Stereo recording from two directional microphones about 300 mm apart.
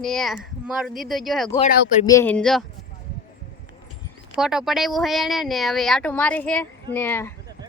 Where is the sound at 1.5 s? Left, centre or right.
Left.